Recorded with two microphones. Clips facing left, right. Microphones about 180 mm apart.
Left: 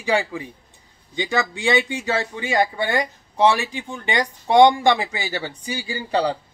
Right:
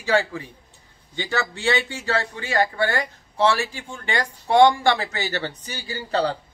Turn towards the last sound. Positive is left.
turn(degrees=15)  # may be behind; listen again after turning